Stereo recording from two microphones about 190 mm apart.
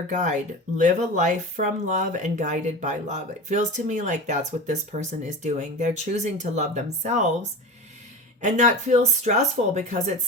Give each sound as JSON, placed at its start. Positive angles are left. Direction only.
{"t": 0.1, "sound": "speech", "side_deg": -40}
{"t": 8.4, "sound": "speech", "side_deg": -40}